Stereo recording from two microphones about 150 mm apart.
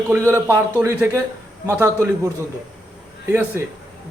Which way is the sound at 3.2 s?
15° right (ahead or behind).